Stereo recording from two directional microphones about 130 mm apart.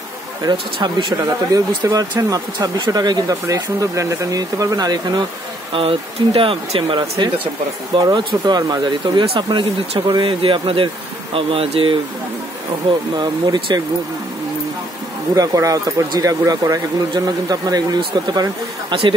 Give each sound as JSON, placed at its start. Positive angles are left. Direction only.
{"t": 0.4, "sound": "speech", "side_deg": -35}
{"t": 1.5, "sound": "speech", "side_deg": -30}
{"t": 5.7, "sound": "speech", "side_deg": -45}
{"t": 13.2, "sound": "speech", "side_deg": -35}
{"t": 15.3, "sound": "speech", "side_deg": -25}